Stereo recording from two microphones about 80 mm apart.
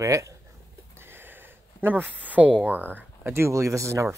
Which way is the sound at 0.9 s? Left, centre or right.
Right.